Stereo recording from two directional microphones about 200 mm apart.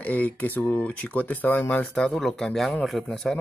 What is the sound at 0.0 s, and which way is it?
Speech, 5° left (ahead or behind).